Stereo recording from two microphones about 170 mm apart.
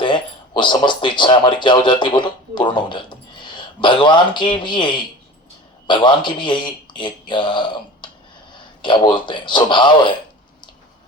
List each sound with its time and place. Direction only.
0.0 s speech: 25° left (ahead or behind)